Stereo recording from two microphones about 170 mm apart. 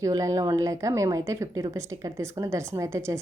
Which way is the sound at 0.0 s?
20° right (ahead or behind).